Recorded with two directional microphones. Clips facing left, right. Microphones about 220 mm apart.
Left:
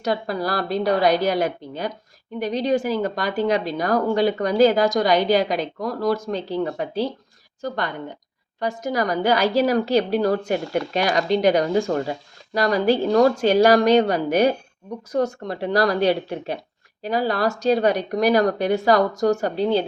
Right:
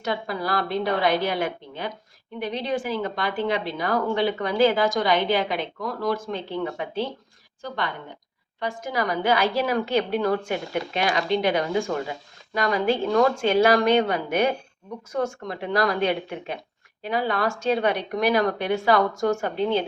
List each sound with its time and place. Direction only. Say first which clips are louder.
0.0 s speech: left 4 dB; 40° left (ahead or behind)
8.6 s speech: left 4 dB; 40° left (ahead or behind)